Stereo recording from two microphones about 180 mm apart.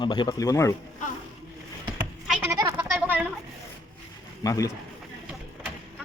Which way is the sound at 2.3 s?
10° right (ahead or behind).